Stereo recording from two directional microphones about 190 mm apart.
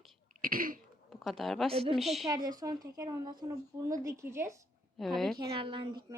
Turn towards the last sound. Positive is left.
turn(degrees=-25)  # may be behind; listen again after turning